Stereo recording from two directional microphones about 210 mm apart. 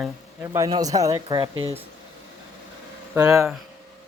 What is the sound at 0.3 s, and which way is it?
Speech, 10° right (ahead or behind).